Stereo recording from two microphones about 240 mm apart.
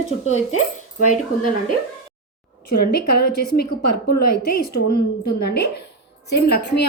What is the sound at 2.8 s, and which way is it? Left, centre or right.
A woman's voice, left.